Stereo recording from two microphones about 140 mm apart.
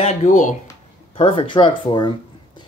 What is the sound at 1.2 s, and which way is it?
Speech, 40° left (ahead or behind).